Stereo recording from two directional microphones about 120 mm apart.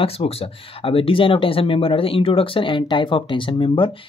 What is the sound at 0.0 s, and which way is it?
Speech, 55° left (ahead or behind).